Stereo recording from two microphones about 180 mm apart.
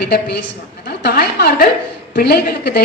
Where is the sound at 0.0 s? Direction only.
65° left (ahead or behind).